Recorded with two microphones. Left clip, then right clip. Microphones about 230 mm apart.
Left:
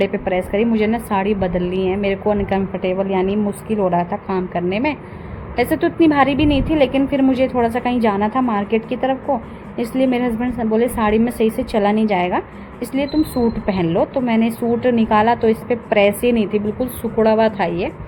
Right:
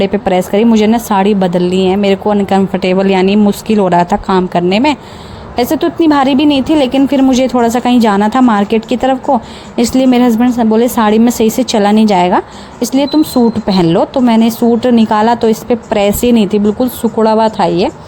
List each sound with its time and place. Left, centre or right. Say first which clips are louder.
0.0 s a woman's voice: right 7 dB; right